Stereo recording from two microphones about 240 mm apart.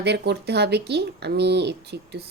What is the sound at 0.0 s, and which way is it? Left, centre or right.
Speech, right.